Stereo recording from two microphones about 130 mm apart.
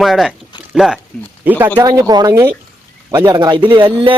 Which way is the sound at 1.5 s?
15° right (ahead or behind).